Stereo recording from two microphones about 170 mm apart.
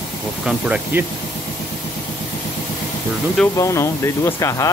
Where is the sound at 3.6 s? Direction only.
15° left (ahead or behind).